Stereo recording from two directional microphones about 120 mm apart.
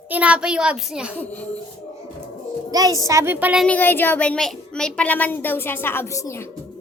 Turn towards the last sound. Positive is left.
turn(degrees=20)  # may be behind; listen again after turning